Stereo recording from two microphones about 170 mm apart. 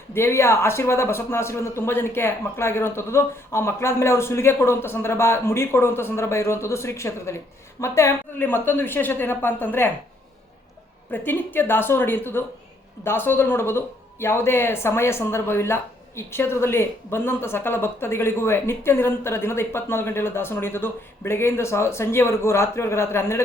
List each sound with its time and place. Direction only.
0.1 s speech: 15° left (ahead or behind)
11.3 s speech: 10° left (ahead or behind)